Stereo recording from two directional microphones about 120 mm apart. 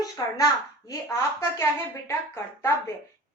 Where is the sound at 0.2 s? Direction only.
30° left (ahead or behind).